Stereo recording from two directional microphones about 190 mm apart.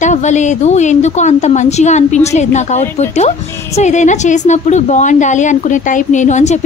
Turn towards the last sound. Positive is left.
turn(degrees=40)  # may be behind; listen again after turning